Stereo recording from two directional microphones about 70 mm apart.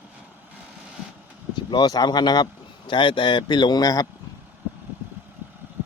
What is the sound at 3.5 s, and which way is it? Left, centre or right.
Speech, left.